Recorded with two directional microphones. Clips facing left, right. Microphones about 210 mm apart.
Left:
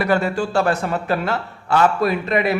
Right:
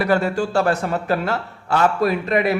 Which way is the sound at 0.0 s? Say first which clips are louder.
Even; 40° right (ahead or behind).